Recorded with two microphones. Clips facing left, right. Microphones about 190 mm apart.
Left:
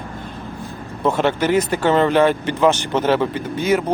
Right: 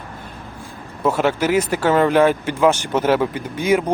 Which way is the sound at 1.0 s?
10° right (ahead or behind).